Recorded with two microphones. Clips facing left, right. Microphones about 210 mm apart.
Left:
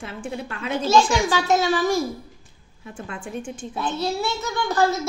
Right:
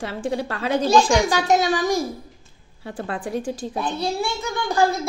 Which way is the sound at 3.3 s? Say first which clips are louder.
Right 4 dB; 35° right (ahead or behind).